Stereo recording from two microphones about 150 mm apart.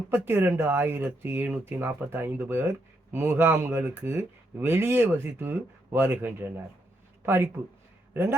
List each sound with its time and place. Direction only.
0.1 s speech: 15° right (ahead or behind)